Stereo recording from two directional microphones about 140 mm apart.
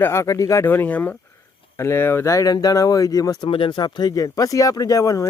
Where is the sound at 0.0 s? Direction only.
20° left (ahead or behind).